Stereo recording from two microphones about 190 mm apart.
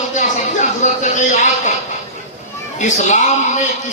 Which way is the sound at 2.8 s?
40° left (ahead or behind).